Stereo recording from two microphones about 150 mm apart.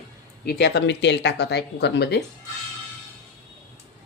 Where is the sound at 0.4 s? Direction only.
90° left.